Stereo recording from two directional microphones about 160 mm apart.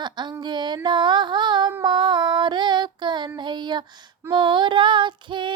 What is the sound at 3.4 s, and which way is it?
Child singing, 30° right (ahead or behind).